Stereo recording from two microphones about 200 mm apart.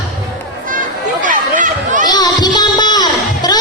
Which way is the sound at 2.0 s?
20° left (ahead or behind).